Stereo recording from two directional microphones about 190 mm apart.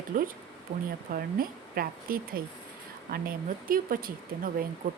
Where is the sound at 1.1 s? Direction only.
50° right (ahead or behind).